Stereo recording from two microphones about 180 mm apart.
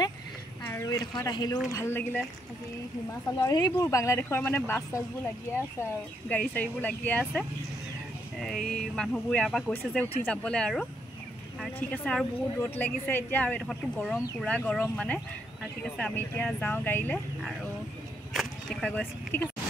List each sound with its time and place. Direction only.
0.7 s a woman's voice: 15° left (ahead or behind)
3.3 s a woman's voice: 20° left (ahead or behind)
18.3 s a sound: centre (ahead or behind)